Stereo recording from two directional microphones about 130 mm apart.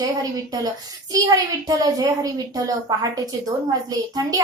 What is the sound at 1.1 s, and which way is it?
A child's voice, 30° right (ahead or behind).